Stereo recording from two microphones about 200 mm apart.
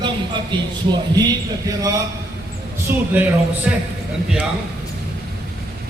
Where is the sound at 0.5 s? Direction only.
25° right (ahead or behind).